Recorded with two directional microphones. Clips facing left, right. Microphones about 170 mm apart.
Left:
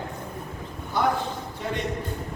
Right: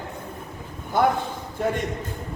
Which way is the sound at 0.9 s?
50° right (ahead or behind).